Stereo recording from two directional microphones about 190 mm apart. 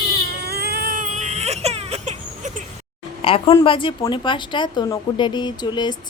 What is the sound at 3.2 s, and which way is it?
A woman's voice, 30° left (ahead or behind).